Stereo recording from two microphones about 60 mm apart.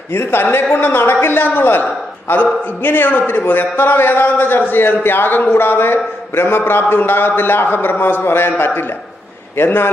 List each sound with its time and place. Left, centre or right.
0.1 s a man's voice: left